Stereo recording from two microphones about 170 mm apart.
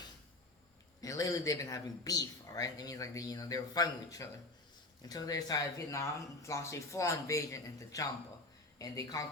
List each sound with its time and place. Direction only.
1.0 s speech: 20° left (ahead or behind)